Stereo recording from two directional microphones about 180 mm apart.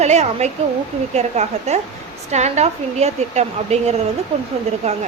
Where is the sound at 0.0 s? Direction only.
40° right (ahead or behind).